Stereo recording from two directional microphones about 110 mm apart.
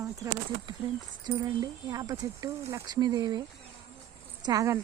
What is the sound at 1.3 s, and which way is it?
Speech, 40° right (ahead or behind).